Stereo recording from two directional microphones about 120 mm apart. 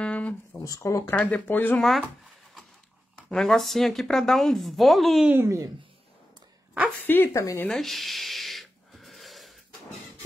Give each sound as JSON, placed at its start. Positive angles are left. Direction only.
{"t": 0.0, "sound": "a sound", "side_deg": 10}
{"t": 0.7, "sound": "speech", "side_deg": 25}
{"t": 1.1, "sound": "speech", "side_deg": 15}
{"t": 1.8, "sound": "speech", "side_deg": 0}
{"t": 3.3, "sound": "speech", "side_deg": 5}
{"t": 5.3, "sound": "speech", "side_deg": -20}
{"t": 7.1, "sound": "speech", "side_deg": 15}
{"t": 7.7, "sound": "a sound", "side_deg": 0}